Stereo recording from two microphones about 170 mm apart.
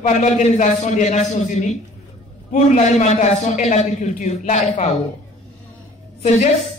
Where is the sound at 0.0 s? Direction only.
45° left (ahead or behind).